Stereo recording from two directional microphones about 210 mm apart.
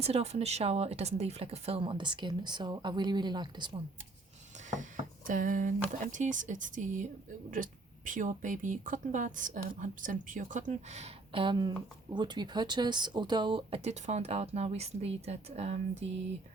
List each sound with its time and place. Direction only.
0.0 s speech: 30° right (ahead or behind)
4.7 s speech: 40° right (ahead or behind)